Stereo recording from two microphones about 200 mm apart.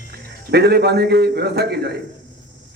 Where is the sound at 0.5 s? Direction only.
55° right (ahead or behind).